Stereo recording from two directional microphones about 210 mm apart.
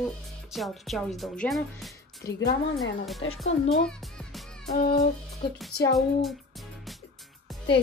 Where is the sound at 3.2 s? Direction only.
70° left (ahead or behind).